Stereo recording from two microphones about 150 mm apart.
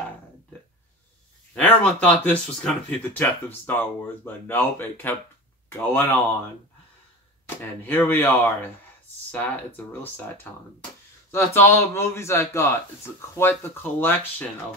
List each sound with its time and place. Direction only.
1.5 s speech: 10° left (ahead or behind)
7.4 s speech: 15° left (ahead or behind)